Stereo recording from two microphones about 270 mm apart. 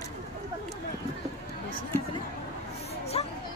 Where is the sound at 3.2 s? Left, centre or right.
Left.